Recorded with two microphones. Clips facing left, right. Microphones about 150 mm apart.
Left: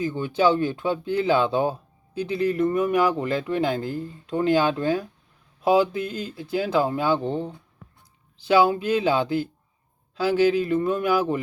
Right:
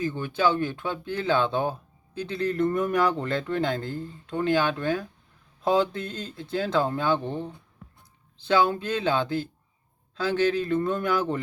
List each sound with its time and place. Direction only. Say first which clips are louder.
0.0 s speech: left 4 dB; 15° left (ahead or behind)